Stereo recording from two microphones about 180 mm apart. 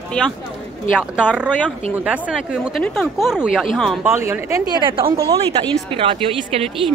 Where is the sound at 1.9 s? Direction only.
10° right (ahead or behind).